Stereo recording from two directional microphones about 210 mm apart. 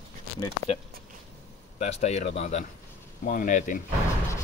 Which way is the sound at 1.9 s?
35° left (ahead or behind).